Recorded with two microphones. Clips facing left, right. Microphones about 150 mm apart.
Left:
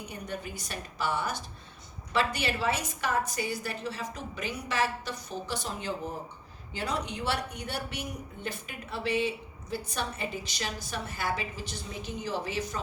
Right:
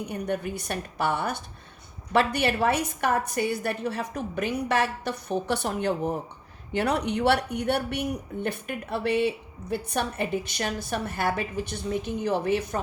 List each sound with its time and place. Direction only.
0.0 s speech: 60° right (ahead or behind)